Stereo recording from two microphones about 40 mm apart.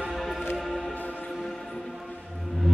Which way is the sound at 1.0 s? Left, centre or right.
Left.